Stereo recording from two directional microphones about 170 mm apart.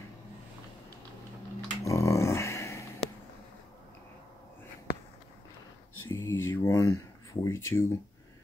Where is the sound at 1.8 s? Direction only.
15° left (ahead or behind).